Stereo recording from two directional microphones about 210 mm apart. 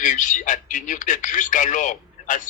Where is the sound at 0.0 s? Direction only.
35° left (ahead or behind).